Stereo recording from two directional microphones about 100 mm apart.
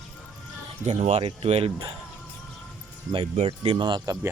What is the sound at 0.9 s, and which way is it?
Speech, 75° right (ahead or behind).